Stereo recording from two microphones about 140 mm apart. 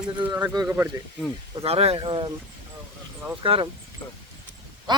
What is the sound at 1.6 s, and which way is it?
Speech, 45° right (ahead or behind).